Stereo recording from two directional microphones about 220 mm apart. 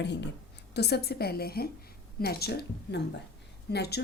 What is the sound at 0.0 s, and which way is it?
Speech, 50° left (ahead or behind).